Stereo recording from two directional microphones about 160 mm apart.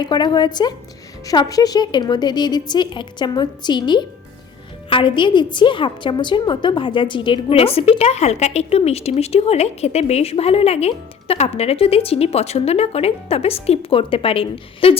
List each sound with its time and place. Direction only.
0.0 s a woman's voice: 25° left (ahead or behind)